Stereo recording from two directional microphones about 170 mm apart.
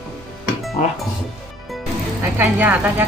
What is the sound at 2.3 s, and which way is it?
Speech, 10° right (ahead or behind).